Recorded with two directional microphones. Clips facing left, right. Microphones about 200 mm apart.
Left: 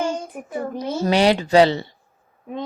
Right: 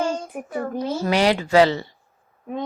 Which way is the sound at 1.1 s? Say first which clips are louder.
Left 2 dB; 25° left (ahead or behind).